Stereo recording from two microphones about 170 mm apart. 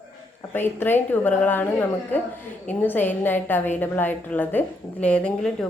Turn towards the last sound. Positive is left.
turn(degrees=5)  # may be behind; listen again after turning